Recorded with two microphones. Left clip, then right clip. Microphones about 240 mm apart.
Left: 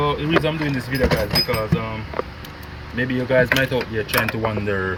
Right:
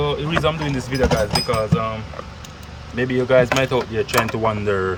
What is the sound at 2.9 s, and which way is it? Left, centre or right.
Speech, centre.